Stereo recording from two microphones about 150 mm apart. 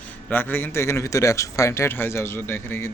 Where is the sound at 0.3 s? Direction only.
15° left (ahead or behind).